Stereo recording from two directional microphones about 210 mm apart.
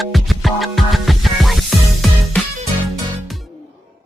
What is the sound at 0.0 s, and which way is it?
Music, centre (ahead or behind).